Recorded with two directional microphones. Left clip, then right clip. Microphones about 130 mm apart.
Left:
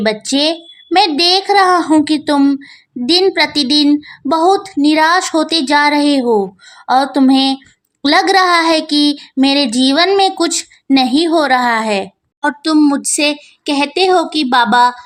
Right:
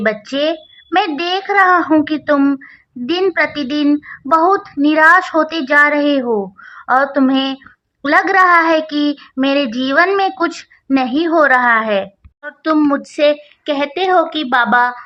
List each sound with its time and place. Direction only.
0.0 s a woman's voice: 25° left (ahead or behind)